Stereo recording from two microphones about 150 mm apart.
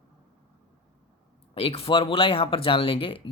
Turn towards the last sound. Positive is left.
turn(degrees=35)  # may be behind; listen again after turning